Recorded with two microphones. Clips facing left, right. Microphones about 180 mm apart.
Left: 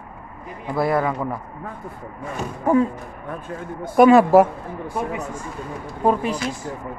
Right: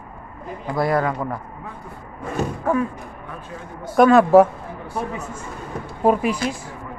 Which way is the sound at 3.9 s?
10° left (ahead or behind).